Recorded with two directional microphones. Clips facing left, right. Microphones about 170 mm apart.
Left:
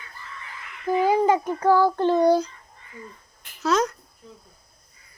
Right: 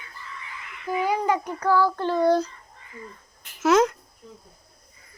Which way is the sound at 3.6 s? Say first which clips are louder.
Right 4 dB; 20° right (ahead or behind).